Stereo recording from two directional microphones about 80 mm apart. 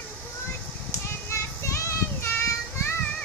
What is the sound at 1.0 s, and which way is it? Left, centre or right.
Child singing, left.